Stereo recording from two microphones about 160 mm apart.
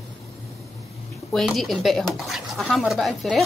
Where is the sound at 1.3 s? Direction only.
Centre (ahead or behind).